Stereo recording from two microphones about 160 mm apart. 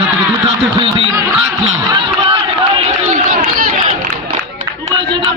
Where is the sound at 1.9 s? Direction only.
35° right (ahead or behind).